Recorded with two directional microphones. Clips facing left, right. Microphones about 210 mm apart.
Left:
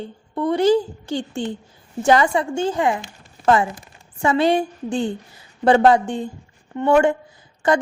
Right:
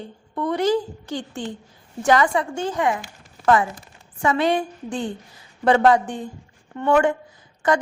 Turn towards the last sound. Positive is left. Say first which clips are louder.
# left 2 dB
turn(degrees=30)  # may be behind; listen again after turning